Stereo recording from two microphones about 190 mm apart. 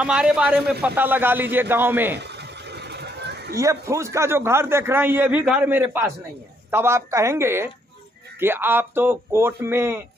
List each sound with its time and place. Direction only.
0.0 s a man's voice: 5° right (ahead or behind)
2.1 s a sound: 60° right (ahead or behind)
3.5 s a man's voice: 15° right (ahead or behind)